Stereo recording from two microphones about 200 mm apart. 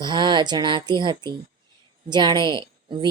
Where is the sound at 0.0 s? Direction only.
20° right (ahead or behind).